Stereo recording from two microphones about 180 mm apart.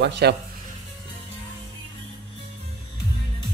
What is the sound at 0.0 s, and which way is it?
Speech, 65° right (ahead or behind).